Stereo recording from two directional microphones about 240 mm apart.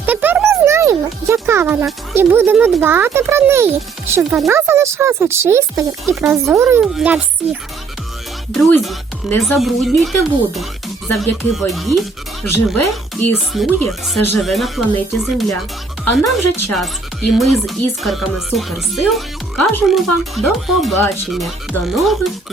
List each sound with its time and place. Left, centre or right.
0.0 s a sound: centre
4.1 s speech: centre
12.5 s speech: left
13.1 s speech: centre